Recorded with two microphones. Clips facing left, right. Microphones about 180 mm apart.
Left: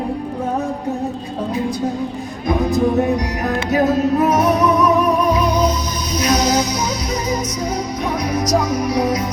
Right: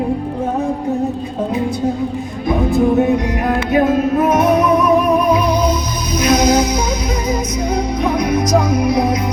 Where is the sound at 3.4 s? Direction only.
40° left (ahead or behind).